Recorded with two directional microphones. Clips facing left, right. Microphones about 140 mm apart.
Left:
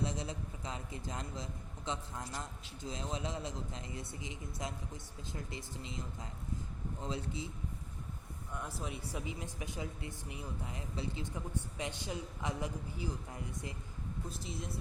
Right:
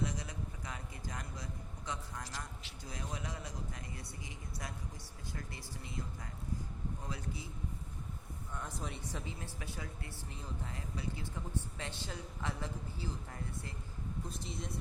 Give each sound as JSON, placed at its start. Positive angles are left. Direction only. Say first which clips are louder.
{"t": 0.0, "sound": "a sound", "louder": "left 2 dB", "side_deg": 25}
{"t": 2.8, "sound": "speech", "louder": "left 4 dB", "side_deg": 25}
{"t": 7.0, "sound": "speech", "louder": "left 4 dB", "side_deg": 25}
{"t": 8.5, "sound": "speech", "louder": "left 2 dB", "side_deg": 5}
{"t": 14.3, "sound": "speech", "louder": "left 1 dB", "side_deg": 0}